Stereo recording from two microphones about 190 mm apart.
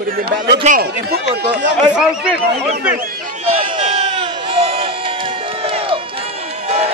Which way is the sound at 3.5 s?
30° right (ahead or behind).